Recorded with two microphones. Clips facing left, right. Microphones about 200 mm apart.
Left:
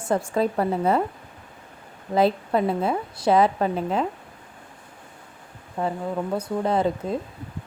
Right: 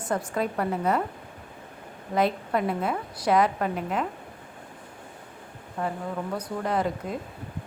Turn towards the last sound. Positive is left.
turn(degrees=25)  # may be behind; listen again after turning